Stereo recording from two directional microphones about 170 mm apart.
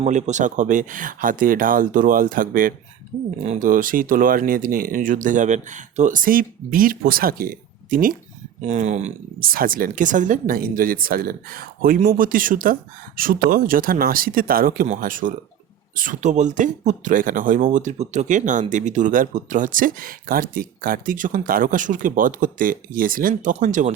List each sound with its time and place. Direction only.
0.0 s speech: 45° right (ahead or behind)
8.6 s speech: 45° right (ahead or behind)
9.5 s speech: 55° right (ahead or behind)